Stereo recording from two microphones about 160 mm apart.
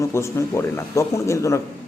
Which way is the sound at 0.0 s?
15° left (ahead or behind).